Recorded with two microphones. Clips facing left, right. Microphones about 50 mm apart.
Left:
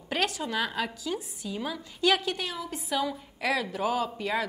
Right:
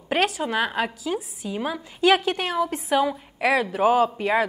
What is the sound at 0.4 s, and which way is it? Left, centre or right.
A woman's voice, right.